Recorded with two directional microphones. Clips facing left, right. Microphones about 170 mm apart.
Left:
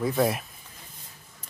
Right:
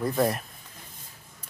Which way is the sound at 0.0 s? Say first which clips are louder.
Left 1 dB; centre (ahead or behind).